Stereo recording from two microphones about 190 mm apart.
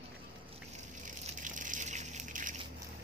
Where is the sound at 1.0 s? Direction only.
45° right (ahead or behind).